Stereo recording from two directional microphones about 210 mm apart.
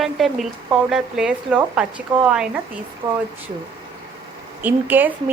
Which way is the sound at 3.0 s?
20° right (ahead or behind).